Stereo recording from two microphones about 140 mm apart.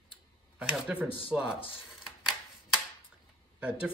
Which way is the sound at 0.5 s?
5° right (ahead or behind).